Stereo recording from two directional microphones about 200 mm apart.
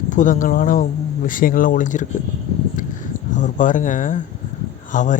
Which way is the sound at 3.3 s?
40° left (ahead or behind).